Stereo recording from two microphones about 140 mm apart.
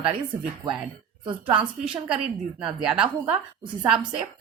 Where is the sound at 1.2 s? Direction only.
35° right (ahead or behind).